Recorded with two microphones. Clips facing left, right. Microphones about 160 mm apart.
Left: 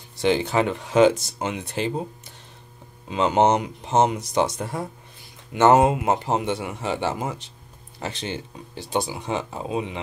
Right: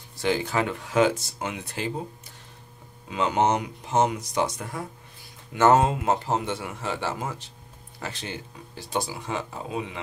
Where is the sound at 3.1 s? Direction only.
25° left (ahead or behind).